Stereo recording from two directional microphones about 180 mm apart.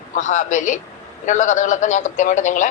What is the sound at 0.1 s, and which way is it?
Speech, 45° left (ahead or behind).